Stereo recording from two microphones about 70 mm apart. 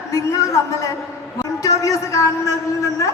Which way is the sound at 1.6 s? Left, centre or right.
Left.